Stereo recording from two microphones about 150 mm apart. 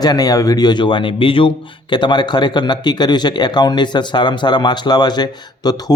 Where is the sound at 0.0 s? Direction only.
25° left (ahead or behind).